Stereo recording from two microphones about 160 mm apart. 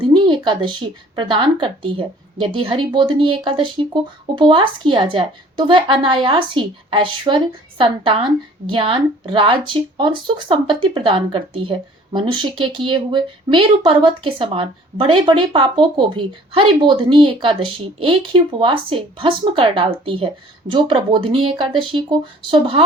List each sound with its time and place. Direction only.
0.0 s a woman's voice: 30° right (ahead or behind)